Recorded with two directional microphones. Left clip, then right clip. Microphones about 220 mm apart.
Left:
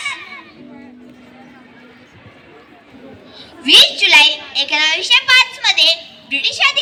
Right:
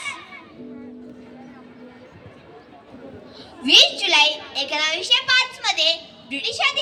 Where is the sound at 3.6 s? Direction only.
55° right (ahead or behind).